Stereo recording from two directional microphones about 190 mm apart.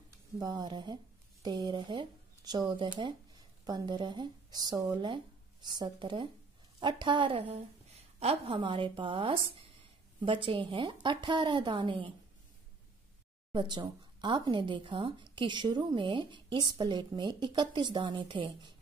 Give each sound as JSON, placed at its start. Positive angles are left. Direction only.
{"t": 0.4, "sound": "speech", "side_deg": -20}
{"t": 13.5, "sound": "speech", "side_deg": -25}